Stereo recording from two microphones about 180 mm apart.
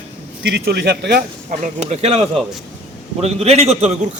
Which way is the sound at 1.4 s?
40° right (ahead or behind).